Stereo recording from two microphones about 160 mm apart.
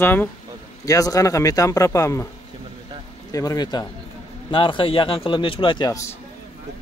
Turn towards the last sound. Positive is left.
turn(degrees=20)  # may be behind; listen again after turning